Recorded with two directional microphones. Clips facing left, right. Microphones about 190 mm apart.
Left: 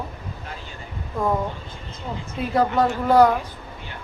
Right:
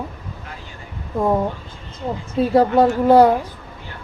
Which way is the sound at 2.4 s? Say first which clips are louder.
Right 6 dB; 30° right (ahead or behind).